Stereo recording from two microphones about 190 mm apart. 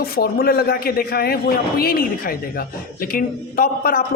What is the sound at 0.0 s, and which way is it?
A man's voice, 55° left (ahead or behind).